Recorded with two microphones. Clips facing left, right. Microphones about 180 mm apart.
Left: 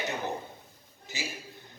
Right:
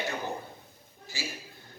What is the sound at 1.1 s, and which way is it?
Speech, 20° left (ahead or behind).